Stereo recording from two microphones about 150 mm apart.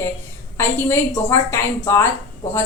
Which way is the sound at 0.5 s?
15° left (ahead or behind).